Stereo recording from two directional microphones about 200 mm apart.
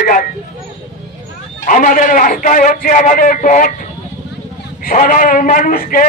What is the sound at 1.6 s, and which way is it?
A man's voice, 40° left (ahead or behind).